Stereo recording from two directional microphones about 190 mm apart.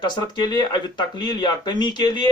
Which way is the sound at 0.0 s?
20° left (ahead or behind).